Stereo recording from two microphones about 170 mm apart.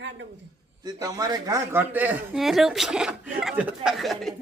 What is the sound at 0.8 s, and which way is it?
Speech, 20° right (ahead or behind).